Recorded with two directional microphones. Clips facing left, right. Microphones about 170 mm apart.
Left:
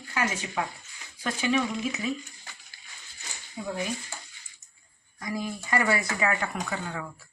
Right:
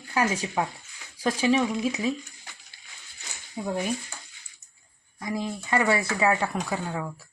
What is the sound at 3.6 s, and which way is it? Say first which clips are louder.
Speech: right 3 dB; 25° right (ahead or behind).